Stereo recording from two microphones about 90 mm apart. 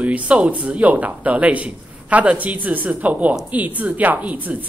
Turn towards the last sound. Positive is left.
turn(degrees=-15)  # may be behind; listen again after turning